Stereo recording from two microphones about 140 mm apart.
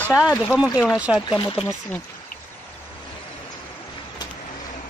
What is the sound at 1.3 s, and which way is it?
Speech, 35° left (ahead or behind).